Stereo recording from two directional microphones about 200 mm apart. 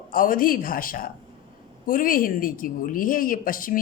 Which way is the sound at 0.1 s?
45° left (ahead or behind).